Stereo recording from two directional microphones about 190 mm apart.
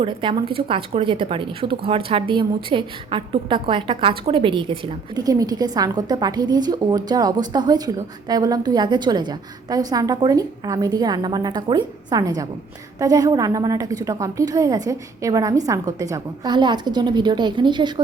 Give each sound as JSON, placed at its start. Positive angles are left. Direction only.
{"t": 0.0, "sound": "a woman's voice", "side_deg": -25}